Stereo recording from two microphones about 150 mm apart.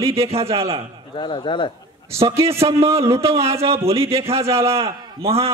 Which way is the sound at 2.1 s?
40° right (ahead or behind).